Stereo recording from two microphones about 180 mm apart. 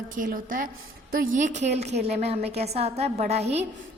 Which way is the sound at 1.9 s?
65° right (ahead or behind).